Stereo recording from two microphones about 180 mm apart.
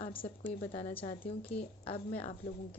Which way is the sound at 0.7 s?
30° left (ahead or behind).